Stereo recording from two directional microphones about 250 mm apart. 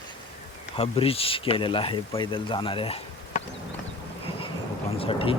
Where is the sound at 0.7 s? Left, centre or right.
Left.